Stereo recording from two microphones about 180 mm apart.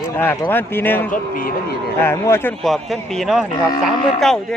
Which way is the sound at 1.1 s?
50° left (ahead or behind).